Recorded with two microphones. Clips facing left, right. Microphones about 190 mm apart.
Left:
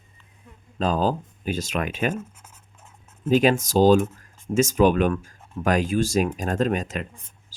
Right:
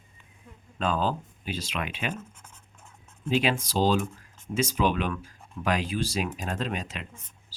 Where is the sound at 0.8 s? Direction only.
40° left (ahead or behind).